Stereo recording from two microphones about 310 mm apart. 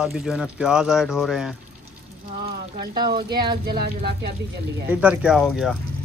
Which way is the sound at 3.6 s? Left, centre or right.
Right.